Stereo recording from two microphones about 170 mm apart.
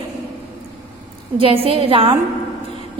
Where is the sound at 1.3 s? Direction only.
30° right (ahead or behind).